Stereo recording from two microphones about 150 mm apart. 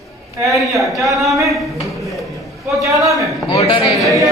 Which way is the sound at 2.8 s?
20° right (ahead or behind).